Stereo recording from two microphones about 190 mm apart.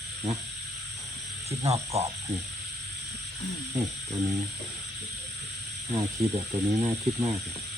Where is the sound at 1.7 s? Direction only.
30° right (ahead or behind).